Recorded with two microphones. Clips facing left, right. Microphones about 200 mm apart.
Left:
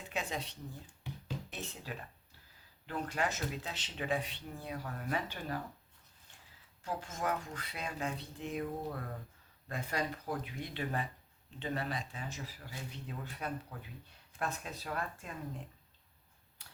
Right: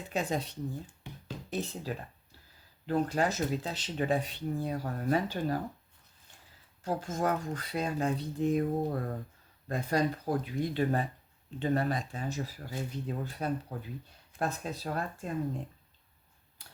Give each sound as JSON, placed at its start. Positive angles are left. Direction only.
{"t": 0.1, "sound": "speech", "side_deg": -40}
{"t": 6.8, "sound": "speech", "side_deg": -40}